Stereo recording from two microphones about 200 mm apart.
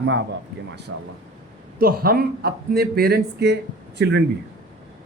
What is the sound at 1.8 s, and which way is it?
A man's voice, 45° right (ahead or behind).